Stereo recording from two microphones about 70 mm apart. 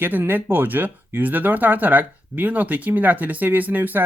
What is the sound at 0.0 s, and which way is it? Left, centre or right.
Speech, right.